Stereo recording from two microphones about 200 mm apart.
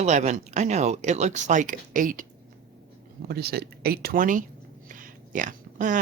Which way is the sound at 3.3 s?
50° right (ahead or behind).